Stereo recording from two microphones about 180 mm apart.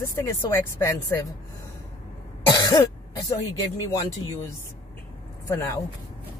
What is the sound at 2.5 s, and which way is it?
Cough, 20° left (ahead or behind).